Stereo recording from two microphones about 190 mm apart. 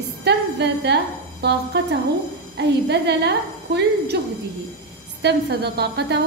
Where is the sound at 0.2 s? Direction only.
60° right (ahead or behind).